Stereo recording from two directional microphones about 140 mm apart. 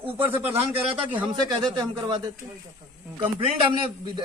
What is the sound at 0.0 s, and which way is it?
Speech, 15° right (ahead or behind).